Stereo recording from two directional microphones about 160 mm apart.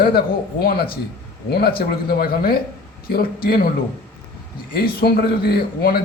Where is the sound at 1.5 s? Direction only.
80° left.